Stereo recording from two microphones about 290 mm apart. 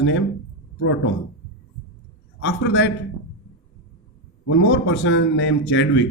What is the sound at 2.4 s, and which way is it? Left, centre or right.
Speech, left.